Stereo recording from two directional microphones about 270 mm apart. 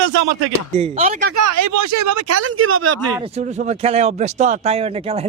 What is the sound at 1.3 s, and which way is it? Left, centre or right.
Speech, right.